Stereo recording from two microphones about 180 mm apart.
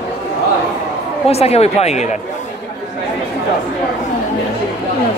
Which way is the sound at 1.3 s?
35° left (ahead or behind).